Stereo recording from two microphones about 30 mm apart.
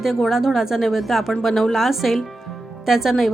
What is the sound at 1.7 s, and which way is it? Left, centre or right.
Music, centre.